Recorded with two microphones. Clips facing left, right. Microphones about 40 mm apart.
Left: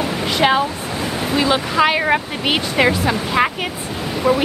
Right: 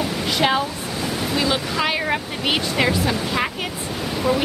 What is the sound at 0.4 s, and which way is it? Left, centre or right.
Speech, centre.